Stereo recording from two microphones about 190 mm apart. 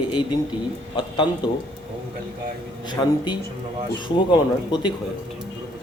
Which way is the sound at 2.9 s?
25° left (ahead or behind).